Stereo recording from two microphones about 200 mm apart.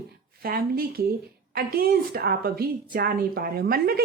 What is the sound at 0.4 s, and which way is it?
A woman's voice, 45° right (ahead or behind).